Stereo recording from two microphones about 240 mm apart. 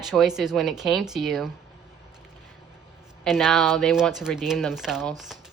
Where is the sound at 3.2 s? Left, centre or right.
Centre.